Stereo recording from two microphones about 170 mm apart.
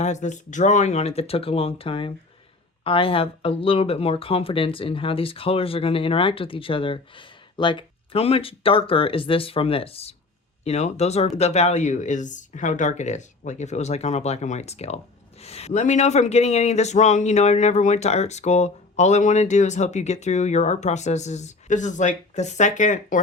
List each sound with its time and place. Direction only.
0.0 s speech: 45° left (ahead or behind)